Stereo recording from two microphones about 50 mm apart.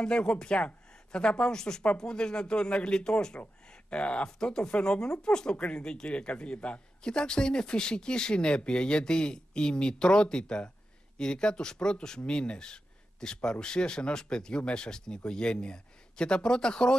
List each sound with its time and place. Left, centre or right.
0.0 s speech: centre